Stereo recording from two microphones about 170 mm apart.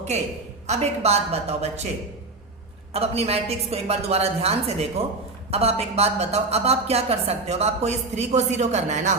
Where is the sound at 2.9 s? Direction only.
35° right (ahead or behind).